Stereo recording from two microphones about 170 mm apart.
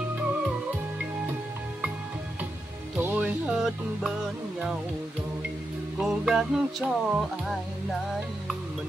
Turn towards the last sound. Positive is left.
turn(degrees=0)  # may be behind; listen again after turning